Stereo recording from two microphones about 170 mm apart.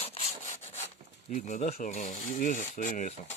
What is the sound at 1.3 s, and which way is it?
Speech, 45° left (ahead or behind).